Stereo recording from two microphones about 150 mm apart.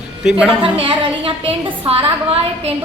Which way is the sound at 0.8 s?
40° right (ahead or behind).